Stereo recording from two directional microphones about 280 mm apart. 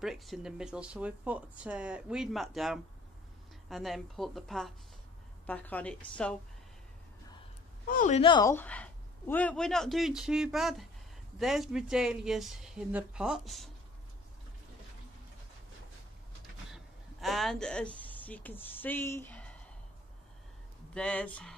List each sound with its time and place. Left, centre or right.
0.0 s speech: centre
7.9 s speech: left; by 13.7 s centre
16.7 s speech: centre
20.9 s speech: centre